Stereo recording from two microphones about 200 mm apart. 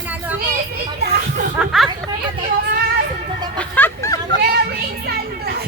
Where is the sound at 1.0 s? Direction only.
50° right (ahead or behind).